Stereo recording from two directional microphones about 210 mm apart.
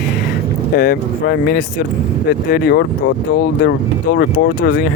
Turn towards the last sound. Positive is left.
turn(degrees=45)  # may be behind; listen again after turning